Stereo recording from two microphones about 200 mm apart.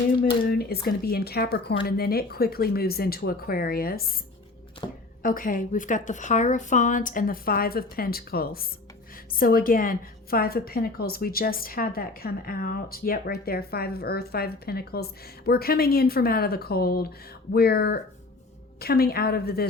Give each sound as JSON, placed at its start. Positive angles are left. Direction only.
{"t": 0.4, "sound": "a woman's voice", "side_deg": 50}
{"t": 5.2, "sound": "a woman's voice", "side_deg": 45}